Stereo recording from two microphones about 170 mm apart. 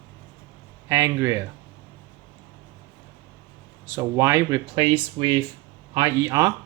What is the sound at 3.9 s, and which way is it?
Speech, 20° right (ahead or behind).